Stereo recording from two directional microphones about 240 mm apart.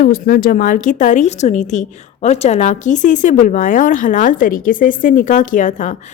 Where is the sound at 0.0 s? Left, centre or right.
Left.